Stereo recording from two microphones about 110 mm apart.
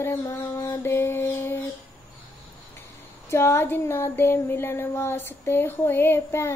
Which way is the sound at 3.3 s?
25° left (ahead or behind).